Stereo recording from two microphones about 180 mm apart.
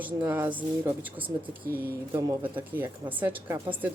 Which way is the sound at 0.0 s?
10° right (ahead or behind).